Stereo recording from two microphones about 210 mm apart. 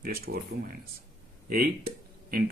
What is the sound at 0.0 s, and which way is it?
Speech, 45° right (ahead or behind).